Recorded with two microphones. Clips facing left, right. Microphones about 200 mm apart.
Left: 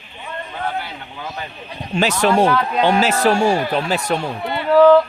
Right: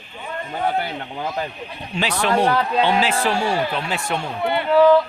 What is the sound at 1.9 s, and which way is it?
A man's voice, 45° left (ahead or behind).